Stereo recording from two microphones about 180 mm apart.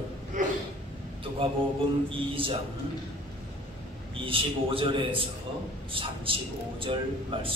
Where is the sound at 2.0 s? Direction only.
30° right (ahead or behind).